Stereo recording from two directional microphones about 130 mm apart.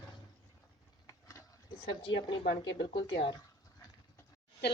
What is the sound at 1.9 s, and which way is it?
A woman's voice, 35° left (ahead or behind).